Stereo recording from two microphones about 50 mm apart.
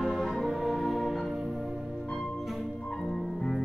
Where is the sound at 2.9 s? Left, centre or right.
Centre.